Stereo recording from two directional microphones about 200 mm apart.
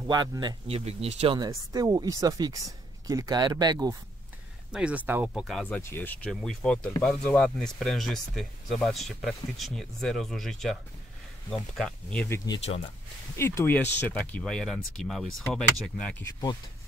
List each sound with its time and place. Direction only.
0.1 s speech: 20° right (ahead or behind)
1.4 s speech: 20° right (ahead or behind)
4.7 s speech: 5° right (ahead or behind)
5.8 s speech: 10° left (ahead or behind)
12.4 s speech: 30° left (ahead or behind)
13.4 s speech: 10° left (ahead or behind)